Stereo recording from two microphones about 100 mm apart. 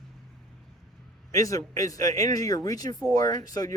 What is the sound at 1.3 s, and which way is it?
Speech, 35° left (ahead or behind).